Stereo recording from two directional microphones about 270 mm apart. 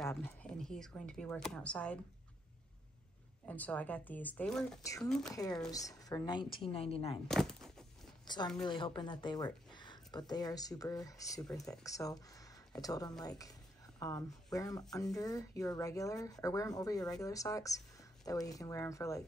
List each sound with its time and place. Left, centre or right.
0.0 s speech: centre
3.4 s speech: centre; by 7.2 s left
7.2 s a sound: centre
8.3 s speech: centre